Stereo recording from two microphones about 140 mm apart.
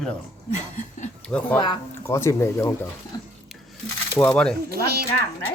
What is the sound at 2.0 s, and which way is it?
Speech, 20° left (ahead or behind).